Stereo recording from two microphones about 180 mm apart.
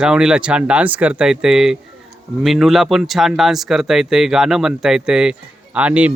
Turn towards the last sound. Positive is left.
turn(degrees=-5)  # may be behind; listen again after turning